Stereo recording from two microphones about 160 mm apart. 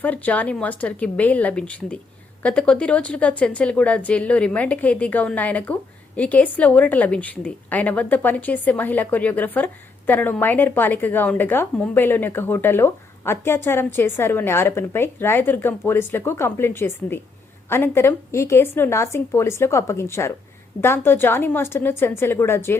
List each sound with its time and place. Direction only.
0.0 s a woman's voice: 10° left (ahead or behind)